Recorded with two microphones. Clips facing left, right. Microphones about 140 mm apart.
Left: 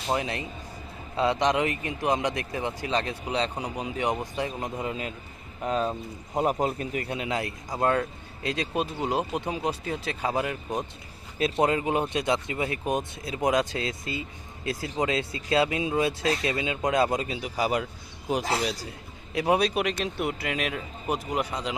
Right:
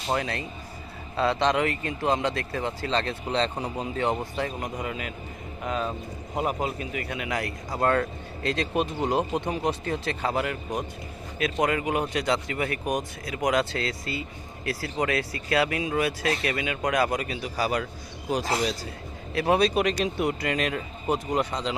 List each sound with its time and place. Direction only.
0.1 s speech: 20° left (ahead or behind)
7.8 s speech: 10° left (ahead or behind)
19.3 s speech: 15° left (ahead or behind)